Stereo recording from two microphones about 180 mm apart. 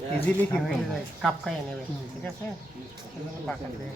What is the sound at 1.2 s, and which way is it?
Speech, centre (ahead or behind).